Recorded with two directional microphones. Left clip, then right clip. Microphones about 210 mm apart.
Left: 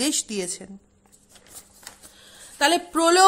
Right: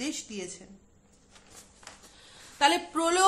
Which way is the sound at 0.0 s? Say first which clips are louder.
Left 10 dB; 45° left (ahead or behind).